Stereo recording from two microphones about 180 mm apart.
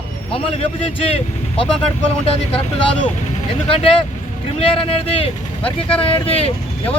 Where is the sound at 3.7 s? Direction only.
30° left (ahead or behind).